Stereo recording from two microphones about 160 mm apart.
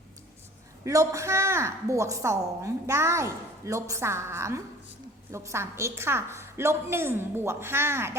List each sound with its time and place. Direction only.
0.9 s a woman's voice: 20° right (ahead or behind)